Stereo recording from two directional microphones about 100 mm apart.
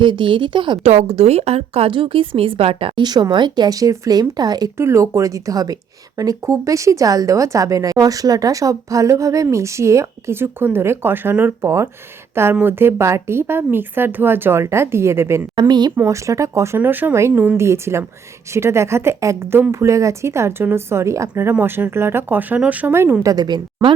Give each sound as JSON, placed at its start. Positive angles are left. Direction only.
{"t": 0.0, "sound": "speech", "side_deg": -55}
{"t": 0.8, "sound": "a woman's voice", "side_deg": -90}
{"t": 3.0, "sound": "speech", "side_deg": -45}
{"t": 4.8, "sound": "a woman's voice", "side_deg": -30}
{"t": 15.5, "sound": "speech", "side_deg": -45}
{"t": 16.0, "sound": "speech", "side_deg": -30}
{"t": 17.6, "sound": "speech", "side_deg": -30}
{"t": 23.2, "sound": "speech", "side_deg": -40}